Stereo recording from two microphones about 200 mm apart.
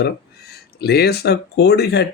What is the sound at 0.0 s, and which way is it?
Speech, 55° left (ahead or behind).